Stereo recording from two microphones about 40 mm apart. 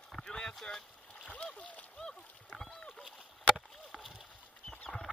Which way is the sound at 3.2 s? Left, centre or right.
Right.